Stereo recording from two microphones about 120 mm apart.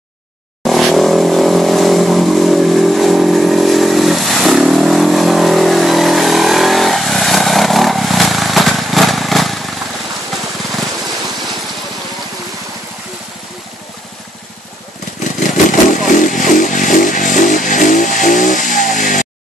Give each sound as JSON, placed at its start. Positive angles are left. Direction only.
{"t": 0.7, "sound": "vehicle", "side_deg": 0}
{"t": 15.4, "sound": "motorcycle", "side_deg": 90}